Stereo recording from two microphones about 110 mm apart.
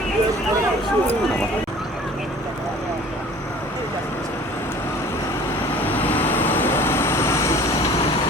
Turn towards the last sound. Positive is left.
turn(degrees=25)  # may be behind; listen again after turning